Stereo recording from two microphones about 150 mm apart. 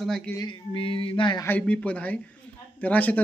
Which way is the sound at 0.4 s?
35° left (ahead or behind).